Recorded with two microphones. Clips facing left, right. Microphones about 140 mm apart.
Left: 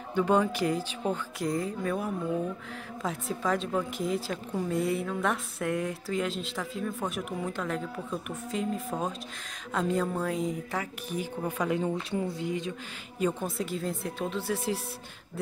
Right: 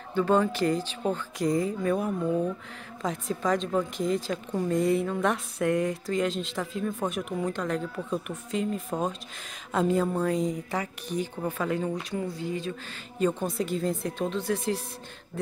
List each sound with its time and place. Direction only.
0.1 s speech: 15° left (ahead or behind)
13.2 s speech: 5° left (ahead or behind)